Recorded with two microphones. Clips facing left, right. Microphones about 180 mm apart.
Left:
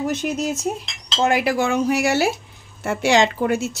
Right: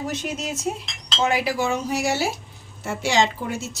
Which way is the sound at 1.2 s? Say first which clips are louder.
Left 3 dB; 55° left (ahead or behind).